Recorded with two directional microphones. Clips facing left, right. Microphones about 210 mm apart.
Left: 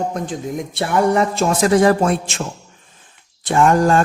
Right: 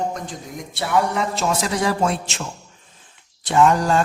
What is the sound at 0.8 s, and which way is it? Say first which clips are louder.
A man's voice: left 4 dB; 50° left (ahead or behind).